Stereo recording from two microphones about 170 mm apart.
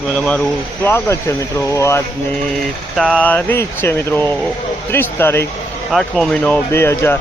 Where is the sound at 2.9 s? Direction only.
Centre (ahead or behind).